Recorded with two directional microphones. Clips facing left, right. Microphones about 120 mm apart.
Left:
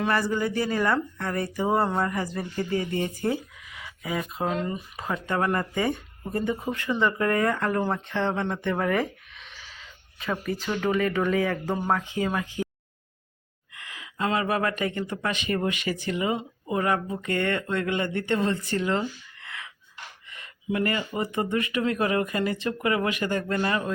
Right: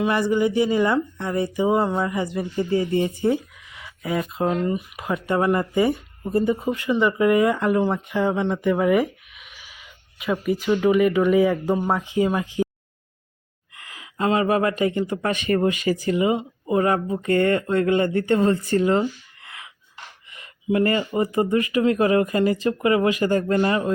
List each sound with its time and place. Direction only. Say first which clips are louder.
0.1 s speech: right 5 dB; 15° right (ahead or behind)
4.4 s speech: right 6 dB; 10° right (ahead or behind)
7.8 s speech: right 5 dB; centre (ahead or behind); by 12.6 s 20° right (ahead or behind)
13.9 s speech: right 5 dB; 30° right (ahead or behind)
15.2 s speech: right 5 dB; 50° right (ahead or behind)
15.6 s speech: right 7 dB; 30° right (ahead or behind)
16.2 s speech: right 6 dB; 20° right (ahead or behind)